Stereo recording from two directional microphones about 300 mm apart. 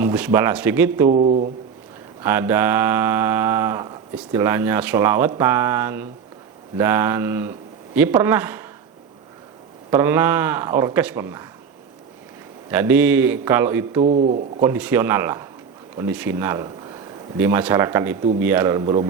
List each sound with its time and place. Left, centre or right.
0.0 s mantra: centre
1.1 s a man's voice: right
2.2 s mantra: centre
9.9 s mantra: centre
12.7 s mantra: centre
14.0 s a man's voice: right
14.6 s mantra: centre
16.0 s speech: centre
18.3 s mantra: centre